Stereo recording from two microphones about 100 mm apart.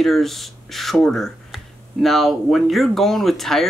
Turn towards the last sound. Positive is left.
turn(degrees=0)  # may be behind; listen again after turning